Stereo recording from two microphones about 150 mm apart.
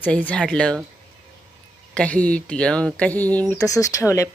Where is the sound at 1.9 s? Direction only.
10° left (ahead or behind).